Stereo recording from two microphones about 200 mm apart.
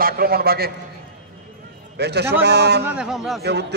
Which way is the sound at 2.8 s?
5° right (ahead or behind).